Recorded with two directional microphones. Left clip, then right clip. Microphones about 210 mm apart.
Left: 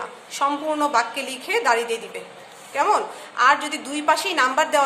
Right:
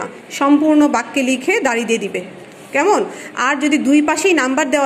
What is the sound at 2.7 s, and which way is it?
A woman's voice, 30° right (ahead or behind).